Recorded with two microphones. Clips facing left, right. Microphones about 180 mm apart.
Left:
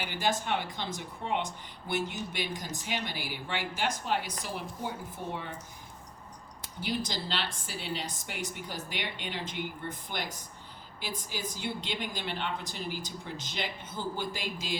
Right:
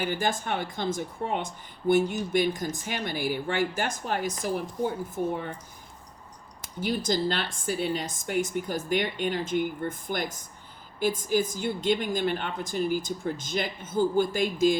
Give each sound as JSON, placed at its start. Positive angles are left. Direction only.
{"t": 0.0, "sound": "speech", "side_deg": -50}
{"t": 6.6, "sound": "speech", "side_deg": -45}